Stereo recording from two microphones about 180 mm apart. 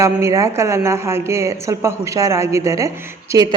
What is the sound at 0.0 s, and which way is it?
A woman's voice, 15° right (ahead or behind).